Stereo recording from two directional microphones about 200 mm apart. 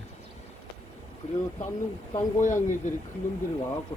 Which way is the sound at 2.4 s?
40° left (ahead or behind).